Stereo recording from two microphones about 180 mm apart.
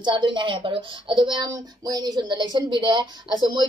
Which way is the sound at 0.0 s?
25° right (ahead or behind).